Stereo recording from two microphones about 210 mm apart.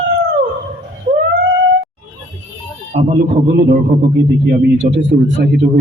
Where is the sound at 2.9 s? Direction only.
45° right (ahead or behind).